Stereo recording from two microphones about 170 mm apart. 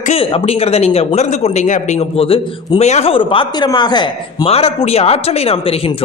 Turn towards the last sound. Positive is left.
turn(degrees=35)  # may be behind; listen again after turning